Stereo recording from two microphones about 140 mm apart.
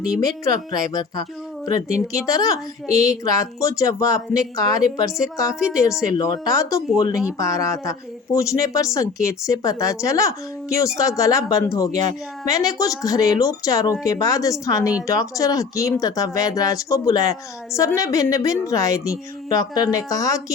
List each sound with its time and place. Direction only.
0.2 s a woman's voice: 25° left (ahead or behind)